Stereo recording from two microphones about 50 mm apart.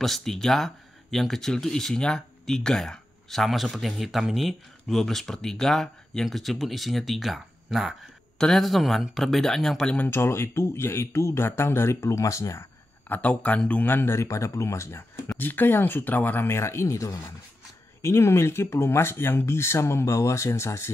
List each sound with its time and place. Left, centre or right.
0.0 s speech: centre
10.0 s speech: left
13.1 s speech: left
13.8 s speech: left
14.1 s speech: left
15.3 s speech: left
16.4 s speech: left
18.0 s speech: left